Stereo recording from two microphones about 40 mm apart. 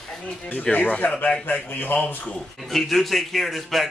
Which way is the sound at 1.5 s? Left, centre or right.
Left.